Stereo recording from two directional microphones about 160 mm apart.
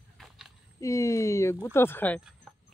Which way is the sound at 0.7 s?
20° left (ahead or behind).